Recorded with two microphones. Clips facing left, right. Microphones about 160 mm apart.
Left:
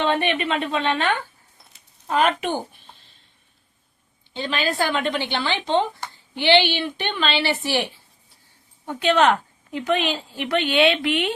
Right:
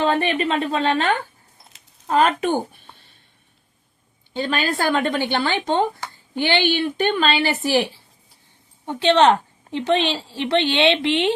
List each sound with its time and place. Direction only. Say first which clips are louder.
0.0 s a woman's voice: right 2 dB; 35° right (ahead or behind)
2.0 s a woman's voice: right 3 dB; 40° right (ahead or behind)
4.4 s a woman's voice: right 1 dB; 50° right (ahead or behind); by 11.3 s 25° right (ahead or behind)